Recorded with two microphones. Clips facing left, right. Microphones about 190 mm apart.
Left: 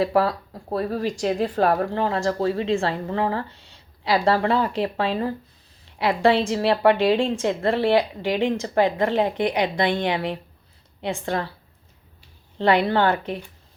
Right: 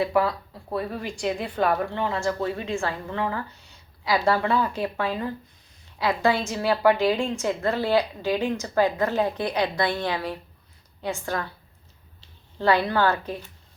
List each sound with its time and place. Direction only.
0.0 s a woman's voice: 35° left (ahead or behind)
12.5 s a woman's voice: 25° left (ahead or behind)